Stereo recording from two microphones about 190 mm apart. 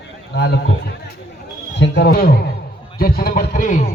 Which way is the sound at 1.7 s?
65° left (ahead or behind).